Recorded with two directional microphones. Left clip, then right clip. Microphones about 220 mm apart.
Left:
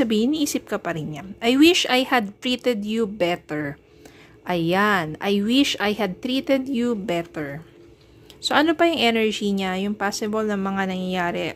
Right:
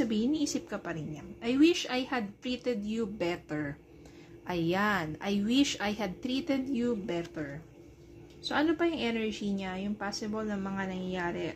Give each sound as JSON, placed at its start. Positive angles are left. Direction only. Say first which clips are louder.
{"t": 0.0, "sound": "a woman's voice", "louder": "left 9 dB", "side_deg": 35}